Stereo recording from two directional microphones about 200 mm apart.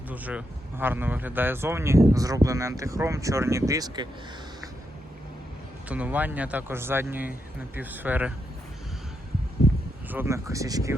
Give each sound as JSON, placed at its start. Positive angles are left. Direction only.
{"t": 0.1, "sound": "speech", "side_deg": -5}
{"t": 5.9, "sound": "speech", "side_deg": -10}
{"t": 10.1, "sound": "speech", "side_deg": -10}